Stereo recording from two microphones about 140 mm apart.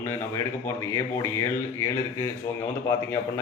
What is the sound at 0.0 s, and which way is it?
Speech, 20° left (ahead or behind).